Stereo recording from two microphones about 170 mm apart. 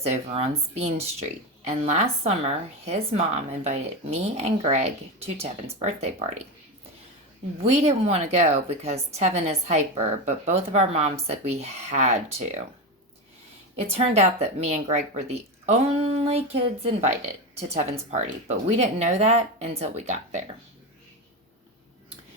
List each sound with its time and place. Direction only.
0.1 s a woman's voice: 40° right (ahead or behind)
7.6 s a woman's voice: 40° right (ahead or behind)
13.9 s a woman's voice: 40° right (ahead or behind)